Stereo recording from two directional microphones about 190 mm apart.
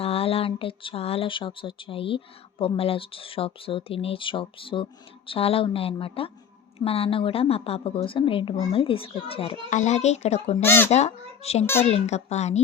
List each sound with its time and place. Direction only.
0.0 s speech: 30° left (ahead or behind)
10.6 s speech: 10° left (ahead or behind)
10.9 s a child's voice: 35° left (ahead or behind)